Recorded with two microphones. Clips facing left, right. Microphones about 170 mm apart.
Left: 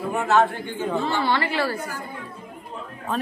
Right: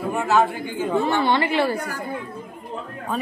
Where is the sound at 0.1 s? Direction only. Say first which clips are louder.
Even; centre (ahead or behind); by 1.8 s 20° right (ahead or behind).